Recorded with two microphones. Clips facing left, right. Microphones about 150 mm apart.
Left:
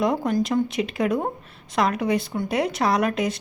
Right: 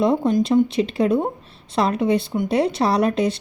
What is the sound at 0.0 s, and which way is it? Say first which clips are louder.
A woman's voice: right 4 dB; 25° right (ahead or behind).